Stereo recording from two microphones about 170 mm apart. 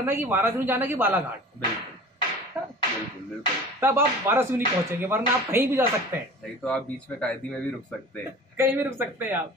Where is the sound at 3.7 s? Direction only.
15° right (ahead or behind).